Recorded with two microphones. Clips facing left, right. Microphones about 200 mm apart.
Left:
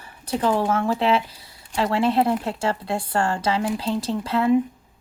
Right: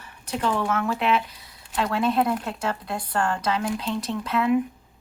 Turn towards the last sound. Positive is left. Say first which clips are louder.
# left 3 dB
turn(degrees=30)  # may be behind; listen again after turning